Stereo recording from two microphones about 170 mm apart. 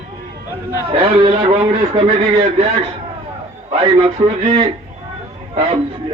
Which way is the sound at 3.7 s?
35° right (ahead or behind).